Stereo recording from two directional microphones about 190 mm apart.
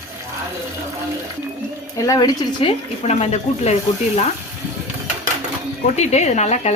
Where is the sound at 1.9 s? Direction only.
15° left (ahead or behind).